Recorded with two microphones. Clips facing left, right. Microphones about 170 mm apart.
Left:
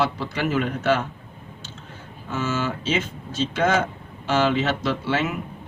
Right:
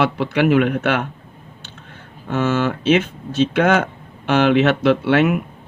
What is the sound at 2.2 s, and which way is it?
Speech, 60° right (ahead or behind).